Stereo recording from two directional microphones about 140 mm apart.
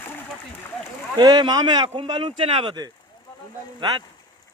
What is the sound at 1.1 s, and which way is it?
Speech, 30° right (ahead or behind).